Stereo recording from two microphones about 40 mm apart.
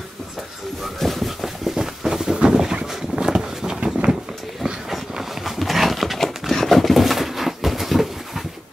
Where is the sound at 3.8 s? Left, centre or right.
Right.